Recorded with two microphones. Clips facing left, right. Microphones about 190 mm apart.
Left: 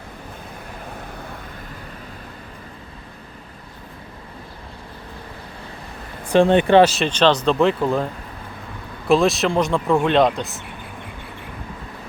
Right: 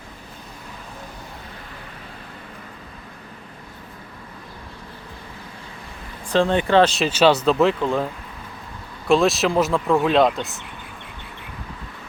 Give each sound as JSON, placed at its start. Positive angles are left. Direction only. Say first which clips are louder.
{"t": 6.3, "sound": "speech", "louder": "left 4 dB", "side_deg": 20}
{"t": 6.8, "sound": "speech", "louder": "even", "side_deg": 0}
{"t": 9.0, "sound": "speech", "louder": "left 1 dB", "side_deg": 0}